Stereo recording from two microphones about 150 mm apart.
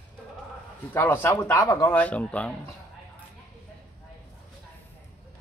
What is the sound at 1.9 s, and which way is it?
Speech, 10° left (ahead or behind).